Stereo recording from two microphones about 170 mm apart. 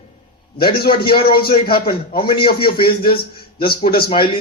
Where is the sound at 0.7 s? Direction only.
65° left (ahead or behind).